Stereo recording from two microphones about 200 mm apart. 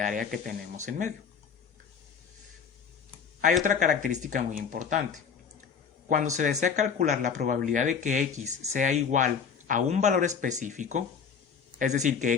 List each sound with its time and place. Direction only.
0.0 s speech: 45° right (ahead or behind)
3.6 s speech: 40° right (ahead or behind)
6.1 s speech: 40° right (ahead or behind)